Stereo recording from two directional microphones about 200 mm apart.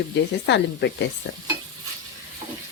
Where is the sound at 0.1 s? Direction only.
60° left (ahead or behind).